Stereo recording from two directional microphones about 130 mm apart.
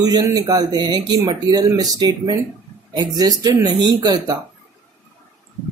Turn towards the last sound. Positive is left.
turn(degrees=-30)  # may be behind; listen again after turning